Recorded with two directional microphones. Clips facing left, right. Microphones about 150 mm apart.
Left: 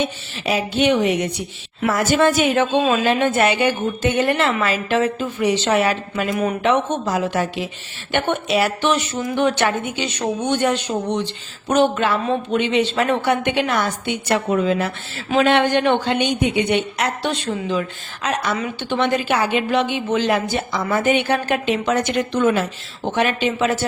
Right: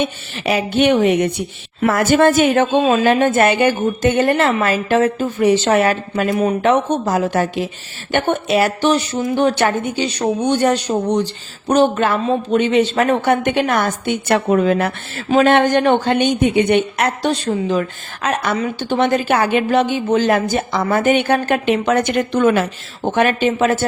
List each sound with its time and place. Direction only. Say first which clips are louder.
0.0 s a woman's voice: right 3 dB; 60° right (ahead or behind)
6.3 s speech: right 4 dB; 30° right (ahead or behind)
6.6 s a woman's voice: right 3 dB; 45° right (ahead or behind)
15.3 s a woman's voice: right 3 dB; 45° right (ahead or behind)
17.3 s a woman's voice: right 4 dB; 35° right (ahead or behind); by 18.5 s 55° right (ahead or behind)
18.5 s a woman's voice: right 4 dB; 35° right (ahead or behind); by 22.6 s 60° right (ahead or behind)
23.0 s a woman's voice: right 4 dB; 45° right (ahead or behind)